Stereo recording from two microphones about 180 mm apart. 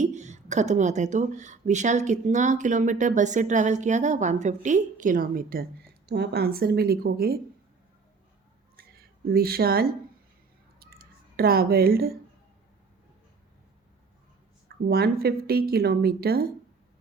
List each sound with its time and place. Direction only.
0.0 s speech: 40° right (ahead or behind); by 7.3 s 55° right (ahead or behind)
8.7 s a sound: 55° right (ahead or behind)
14.8 s speech: 60° right (ahead or behind)